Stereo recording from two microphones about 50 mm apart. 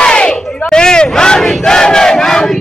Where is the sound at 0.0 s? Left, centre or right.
Centre.